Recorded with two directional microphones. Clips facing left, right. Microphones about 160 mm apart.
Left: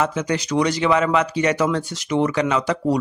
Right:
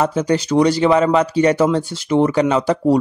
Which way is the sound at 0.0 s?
35° right (ahead or behind).